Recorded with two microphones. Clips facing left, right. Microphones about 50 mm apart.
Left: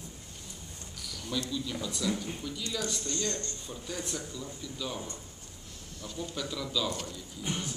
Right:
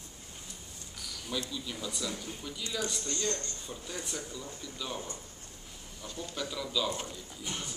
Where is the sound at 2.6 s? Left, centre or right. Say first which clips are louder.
Even; centre.